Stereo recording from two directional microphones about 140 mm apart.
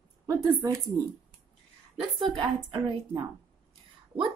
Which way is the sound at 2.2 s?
40° right (ahead or behind).